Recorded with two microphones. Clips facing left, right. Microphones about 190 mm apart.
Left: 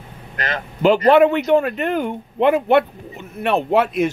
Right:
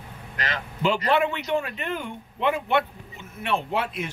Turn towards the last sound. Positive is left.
turn(degrees=70)  # may be behind; listen again after turning